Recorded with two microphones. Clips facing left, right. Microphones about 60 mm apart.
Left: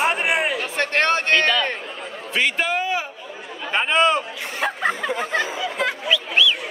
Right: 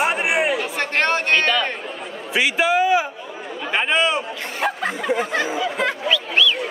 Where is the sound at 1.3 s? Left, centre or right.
Right.